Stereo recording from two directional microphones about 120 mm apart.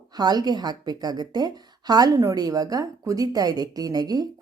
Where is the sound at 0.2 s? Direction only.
35° right (ahead or behind).